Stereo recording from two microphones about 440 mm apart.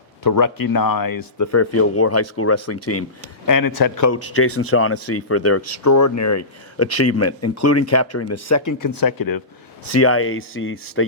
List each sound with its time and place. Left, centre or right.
0.2 s speech: left
1.5 s speech: left
3.4 s speech: left
8.9 s speech: left
9.9 s speech: left